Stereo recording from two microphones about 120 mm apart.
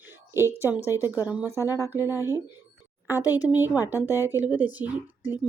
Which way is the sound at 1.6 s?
25° left (ahead or behind).